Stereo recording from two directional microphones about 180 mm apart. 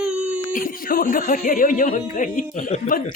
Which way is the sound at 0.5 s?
50° left (ahead or behind).